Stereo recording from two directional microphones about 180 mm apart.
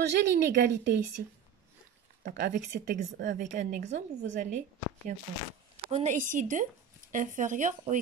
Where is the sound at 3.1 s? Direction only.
55° right (ahead or behind).